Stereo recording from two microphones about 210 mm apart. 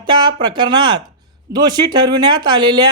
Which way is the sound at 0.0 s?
20° right (ahead or behind).